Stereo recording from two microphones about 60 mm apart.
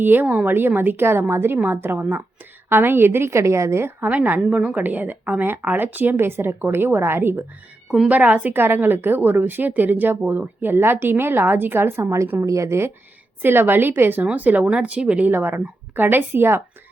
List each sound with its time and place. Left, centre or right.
0.0 s a woman's voice: right
4.0 s a woman's voice: right
8.0 s a woman's voice: right
13.4 s a woman's voice: right
15.3 s a woman's voice: right